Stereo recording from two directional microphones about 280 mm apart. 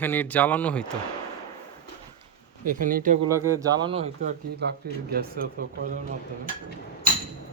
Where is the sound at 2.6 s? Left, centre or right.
Right.